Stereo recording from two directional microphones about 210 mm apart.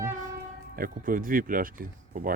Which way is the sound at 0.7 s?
40° right (ahead or behind).